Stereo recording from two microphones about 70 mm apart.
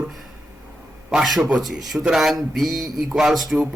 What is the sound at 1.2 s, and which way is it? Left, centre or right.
A man's voice, centre.